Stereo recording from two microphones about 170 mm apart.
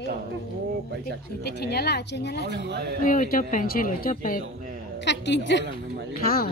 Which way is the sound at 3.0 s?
50° left (ahead or behind).